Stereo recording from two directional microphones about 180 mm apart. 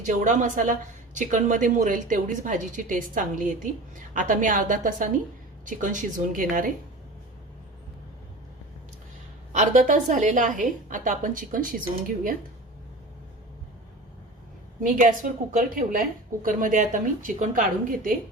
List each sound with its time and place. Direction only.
0.0 s a woman's voice: 45° right (ahead or behind)
9.5 s a woman's voice: 40° right (ahead or behind)
14.8 s a woman's voice: 50° right (ahead or behind)